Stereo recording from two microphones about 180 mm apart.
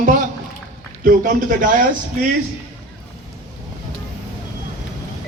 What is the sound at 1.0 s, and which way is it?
Speech, 50° right (ahead or behind).